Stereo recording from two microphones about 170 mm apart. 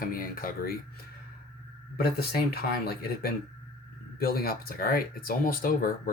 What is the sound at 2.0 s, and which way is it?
Speech, 65° left (ahead or behind).